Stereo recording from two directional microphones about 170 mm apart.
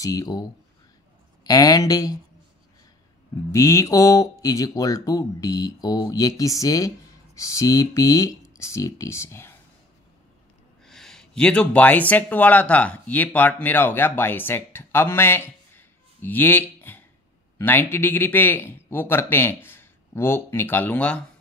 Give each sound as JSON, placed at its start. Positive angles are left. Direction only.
{"t": 0.0, "sound": "speech", "side_deg": 20}
{"t": 3.5, "sound": "a man's voice", "side_deg": 20}
{"t": 10.9, "sound": "a man's voice", "side_deg": 5}